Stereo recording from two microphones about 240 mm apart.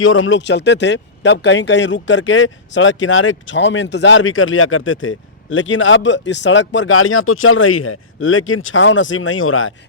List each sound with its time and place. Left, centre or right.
0.0 s speech: left